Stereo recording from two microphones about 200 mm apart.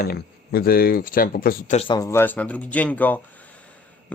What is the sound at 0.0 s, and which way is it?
Speech, 50° left (ahead or behind).